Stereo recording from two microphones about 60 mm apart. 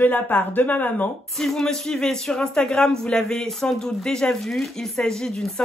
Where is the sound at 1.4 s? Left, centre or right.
Centre.